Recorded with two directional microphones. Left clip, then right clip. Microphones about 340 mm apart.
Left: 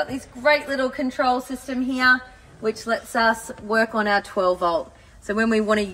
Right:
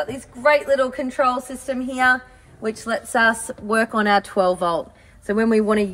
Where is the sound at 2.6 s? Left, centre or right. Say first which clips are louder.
Even; right.